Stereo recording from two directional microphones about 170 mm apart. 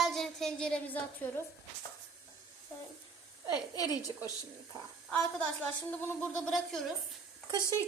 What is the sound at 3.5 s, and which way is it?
Speech, 20° left (ahead or behind).